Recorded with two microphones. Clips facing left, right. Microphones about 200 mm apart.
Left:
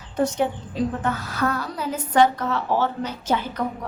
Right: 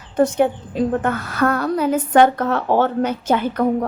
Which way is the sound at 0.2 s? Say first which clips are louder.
Right 6 dB; 55° right (ahead or behind).